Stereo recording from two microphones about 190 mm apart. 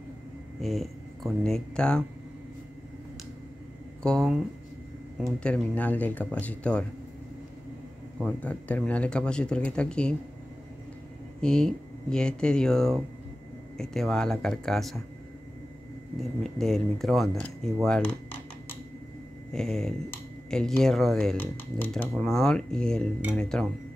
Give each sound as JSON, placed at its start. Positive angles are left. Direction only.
{"t": 0.6, "sound": "speech", "side_deg": 0}
{"t": 4.0, "sound": "speech", "side_deg": 5}
{"t": 5.4, "sound": "speech", "side_deg": 5}
{"t": 8.2, "sound": "speech", "side_deg": 5}
{"t": 11.4, "sound": "speech", "side_deg": 5}
{"t": 16.2, "sound": "speech", "side_deg": 0}
{"t": 17.8, "sound": "dishes", "side_deg": 5}
{"t": 19.5, "sound": "speech", "side_deg": 5}